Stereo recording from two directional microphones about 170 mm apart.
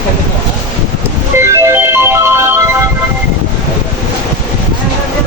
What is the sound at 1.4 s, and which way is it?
Music, 15° right (ahead or behind).